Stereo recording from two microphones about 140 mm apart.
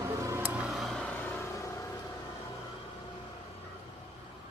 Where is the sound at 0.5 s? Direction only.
5° right (ahead or behind).